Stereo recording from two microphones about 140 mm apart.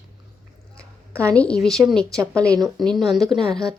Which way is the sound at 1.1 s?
20° right (ahead or behind).